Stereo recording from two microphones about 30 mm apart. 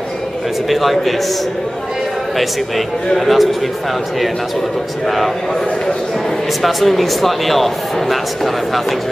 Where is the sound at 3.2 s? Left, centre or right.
Centre.